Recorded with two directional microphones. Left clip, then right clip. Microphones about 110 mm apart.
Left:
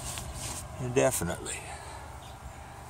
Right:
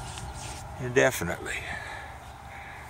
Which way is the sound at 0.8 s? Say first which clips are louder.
Right 3 dB; 10° left (ahead or behind).